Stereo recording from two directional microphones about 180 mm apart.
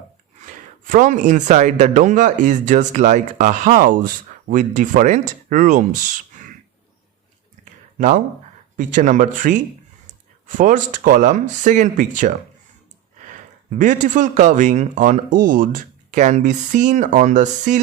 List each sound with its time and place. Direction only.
0.4 s speech: 45° right (ahead or behind)
7.6 s a sound: 45° right (ahead or behind)
8.7 s speech: 45° right (ahead or behind)